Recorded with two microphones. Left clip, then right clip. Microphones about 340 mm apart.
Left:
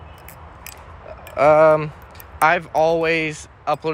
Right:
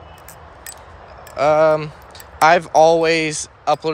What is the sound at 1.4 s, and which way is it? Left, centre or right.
Speech, centre.